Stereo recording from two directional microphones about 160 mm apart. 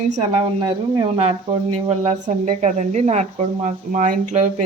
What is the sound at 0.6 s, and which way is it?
Speech, 30° right (ahead or behind).